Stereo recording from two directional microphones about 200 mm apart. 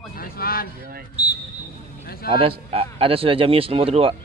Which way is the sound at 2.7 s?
30° right (ahead or behind).